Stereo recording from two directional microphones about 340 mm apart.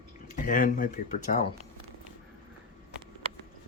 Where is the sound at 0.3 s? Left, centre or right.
Left.